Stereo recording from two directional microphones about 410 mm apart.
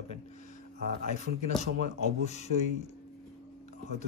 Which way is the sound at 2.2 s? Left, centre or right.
Centre.